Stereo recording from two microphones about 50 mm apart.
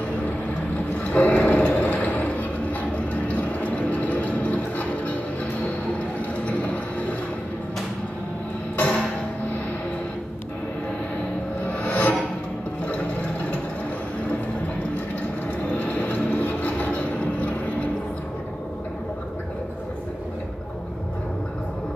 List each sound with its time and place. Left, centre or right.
1.0 s a sound: left
8.7 s music: left
11.6 s music: left
15.7 s music: left